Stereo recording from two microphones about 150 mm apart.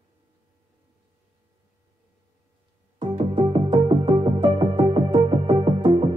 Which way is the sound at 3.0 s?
35° right (ahead or behind).